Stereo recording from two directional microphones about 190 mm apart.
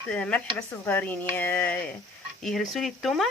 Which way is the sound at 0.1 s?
5° left (ahead or behind).